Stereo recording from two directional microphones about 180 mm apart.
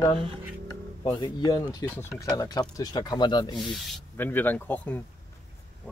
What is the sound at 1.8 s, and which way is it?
Speech, 10° left (ahead or behind).